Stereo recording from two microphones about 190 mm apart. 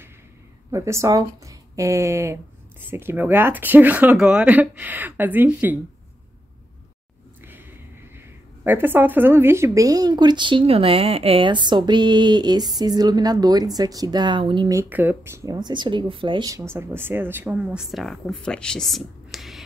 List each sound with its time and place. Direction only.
0.7 s speech: 15° right (ahead or behind)
8.2 s speech: 10° right (ahead or behind)